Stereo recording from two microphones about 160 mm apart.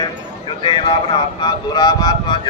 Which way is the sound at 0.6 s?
30° left (ahead or behind).